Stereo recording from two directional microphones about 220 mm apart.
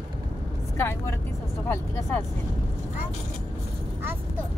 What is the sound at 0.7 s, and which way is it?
Speech, 10° left (ahead or behind).